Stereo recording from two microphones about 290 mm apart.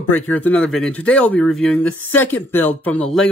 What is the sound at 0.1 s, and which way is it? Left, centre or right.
Speech, centre.